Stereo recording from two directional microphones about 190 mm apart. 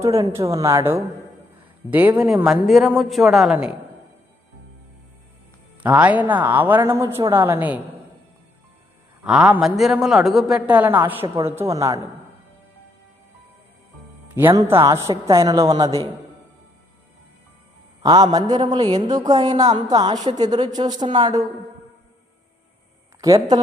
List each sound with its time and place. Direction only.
0.0 s a woman's voice: 15° right (ahead or behind)
5.8 s a woman's voice: 10° right (ahead or behind)
9.2 s a man's voice: 5° right (ahead or behind)
14.3 s a woman's voice: 15° right (ahead or behind)
18.0 s a man's voice: 20° right (ahead or behind)
23.2 s a man's voice: 20° right (ahead or behind)